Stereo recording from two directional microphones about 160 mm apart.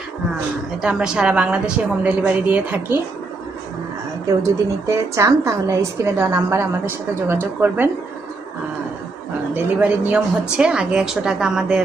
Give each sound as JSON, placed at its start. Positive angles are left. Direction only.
{"t": 0.8, "sound": "a woman's voice", "side_deg": -5}
{"t": 4.9, "sound": "a woman's voice", "side_deg": -20}
{"t": 9.6, "sound": "speech", "side_deg": -10}